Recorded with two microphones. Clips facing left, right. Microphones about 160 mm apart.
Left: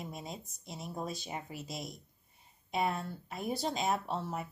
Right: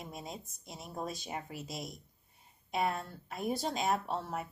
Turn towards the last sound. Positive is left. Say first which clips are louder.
# even
turn(degrees=0)  # may be behind; listen again after turning